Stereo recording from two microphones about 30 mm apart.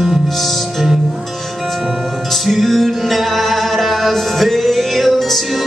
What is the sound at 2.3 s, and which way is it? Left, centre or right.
Music, centre.